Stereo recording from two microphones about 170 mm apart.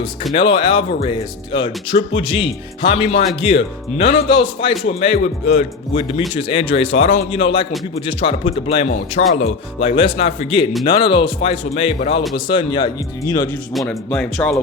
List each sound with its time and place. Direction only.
0.3 s speech: 30° left (ahead or behind)
12.5 s speech: 25° left (ahead or behind)
13.7 s speech: 5° left (ahead or behind)